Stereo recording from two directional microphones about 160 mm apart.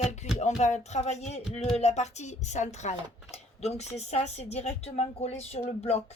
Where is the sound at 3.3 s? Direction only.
40° left (ahead or behind).